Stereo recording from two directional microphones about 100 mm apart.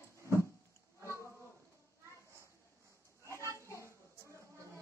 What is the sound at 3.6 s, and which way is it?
Children playing, 30° left (ahead or behind).